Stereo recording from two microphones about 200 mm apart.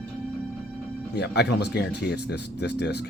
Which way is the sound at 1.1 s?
55° left (ahead or behind).